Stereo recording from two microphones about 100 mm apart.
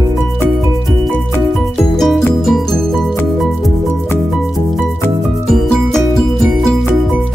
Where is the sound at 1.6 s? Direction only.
5° left (ahead or behind).